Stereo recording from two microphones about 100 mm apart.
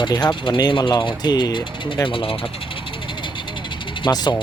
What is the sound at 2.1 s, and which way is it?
Speech, 60° left (ahead or behind).